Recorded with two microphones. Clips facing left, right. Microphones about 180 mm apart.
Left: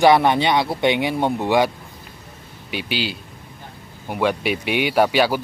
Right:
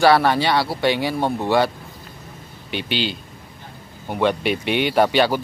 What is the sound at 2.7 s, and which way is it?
A man's voice, 5° left (ahead or behind).